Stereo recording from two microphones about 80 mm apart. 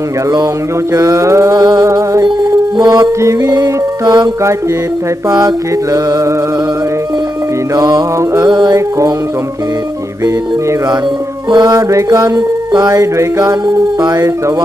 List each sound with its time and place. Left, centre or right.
0.9 s music: right
1.5 s music: right
3.4 s music: right
7.7 s music: right
8.5 s music: right
11.5 s music: right
11.9 s music: right